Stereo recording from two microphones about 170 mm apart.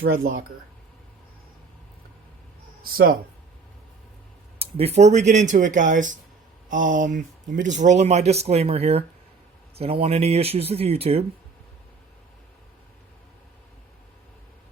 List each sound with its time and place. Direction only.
0.0 s speech: 65° right (ahead or behind)
2.8 s speech: 60° right (ahead or behind)
4.6 s speech: 35° right (ahead or behind)